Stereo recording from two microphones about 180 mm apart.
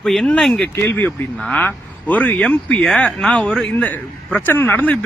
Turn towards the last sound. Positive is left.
turn(degrees=10)  # may be behind; listen again after turning